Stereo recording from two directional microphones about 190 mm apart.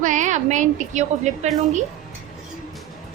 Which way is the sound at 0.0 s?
40° right (ahead or behind).